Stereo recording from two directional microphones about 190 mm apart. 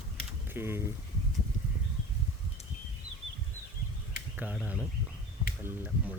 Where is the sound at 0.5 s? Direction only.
10° right (ahead or behind).